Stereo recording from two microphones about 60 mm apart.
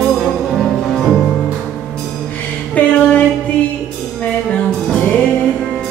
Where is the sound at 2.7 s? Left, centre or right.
Left.